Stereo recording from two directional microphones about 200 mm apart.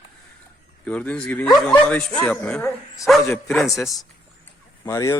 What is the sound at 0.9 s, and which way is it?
Speech, 5° left (ahead or behind).